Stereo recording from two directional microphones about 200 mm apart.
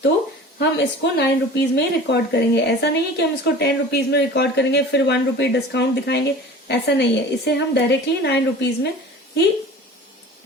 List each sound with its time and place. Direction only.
0.6 s speech: 60° left (ahead or behind)